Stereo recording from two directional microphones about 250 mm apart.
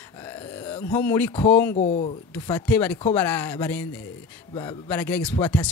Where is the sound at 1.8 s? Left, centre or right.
Left.